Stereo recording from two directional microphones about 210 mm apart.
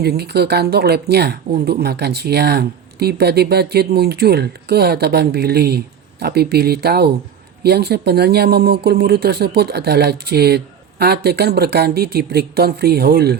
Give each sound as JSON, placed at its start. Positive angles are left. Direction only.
{"t": 0.0, "sound": "speech", "side_deg": -50}